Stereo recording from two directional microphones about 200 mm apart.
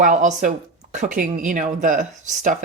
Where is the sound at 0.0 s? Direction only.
40° right (ahead or behind).